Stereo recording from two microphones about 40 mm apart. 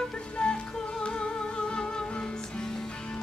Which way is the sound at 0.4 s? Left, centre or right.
Left.